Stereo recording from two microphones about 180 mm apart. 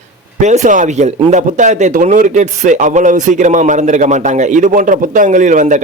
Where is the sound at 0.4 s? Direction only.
45° right (ahead or behind).